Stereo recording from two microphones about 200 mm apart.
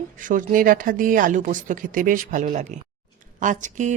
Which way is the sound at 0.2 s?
40° right (ahead or behind).